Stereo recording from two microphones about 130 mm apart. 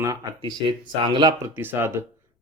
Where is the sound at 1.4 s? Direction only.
20° right (ahead or behind).